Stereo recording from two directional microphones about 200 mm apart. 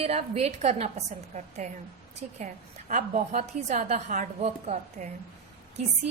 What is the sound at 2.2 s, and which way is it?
A woman's voice, 40° right (ahead or behind).